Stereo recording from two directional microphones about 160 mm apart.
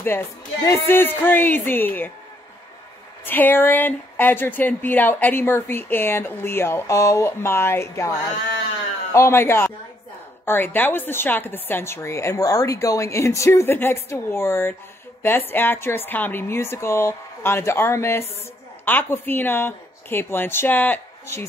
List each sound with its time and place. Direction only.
0.7 s speech: 15° left (ahead or behind)
3.3 s speech: 10° left (ahead or behind)
9.1 s speech: 15° left (ahead or behind)